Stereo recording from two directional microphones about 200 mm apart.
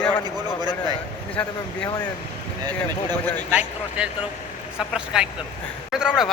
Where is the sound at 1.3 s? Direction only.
5° left (ahead or behind).